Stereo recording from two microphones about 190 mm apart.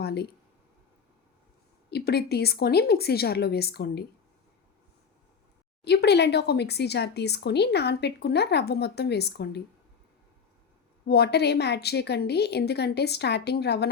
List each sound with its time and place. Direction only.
0.0 s a sound: 60° left (ahead or behind)
1.9 s speech: 60° left (ahead or behind)
5.8 s speech: 60° left (ahead or behind)
11.0 s speech: 60° left (ahead or behind)